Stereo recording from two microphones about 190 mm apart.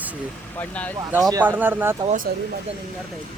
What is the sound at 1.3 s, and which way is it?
Speech, 15° right (ahead or behind).